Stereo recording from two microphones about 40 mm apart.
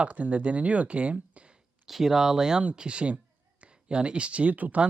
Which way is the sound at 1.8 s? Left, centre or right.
Centre.